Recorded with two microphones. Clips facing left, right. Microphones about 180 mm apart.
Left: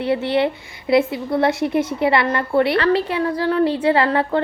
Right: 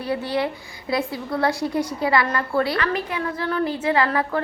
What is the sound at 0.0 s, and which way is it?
A woman's voice, 25° left (ahead or behind).